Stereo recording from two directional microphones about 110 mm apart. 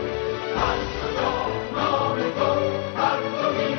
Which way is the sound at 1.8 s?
35° left (ahead or behind).